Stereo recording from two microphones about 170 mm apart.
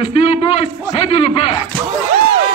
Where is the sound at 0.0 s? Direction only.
35° left (ahead or behind).